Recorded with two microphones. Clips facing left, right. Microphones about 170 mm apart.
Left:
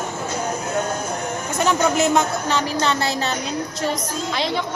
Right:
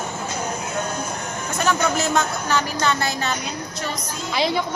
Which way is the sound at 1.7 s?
20° left (ahead or behind).